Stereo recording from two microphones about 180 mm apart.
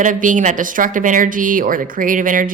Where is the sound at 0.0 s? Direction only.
45° right (ahead or behind).